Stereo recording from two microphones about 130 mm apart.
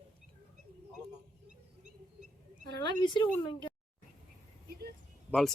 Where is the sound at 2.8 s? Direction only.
40° left (ahead or behind).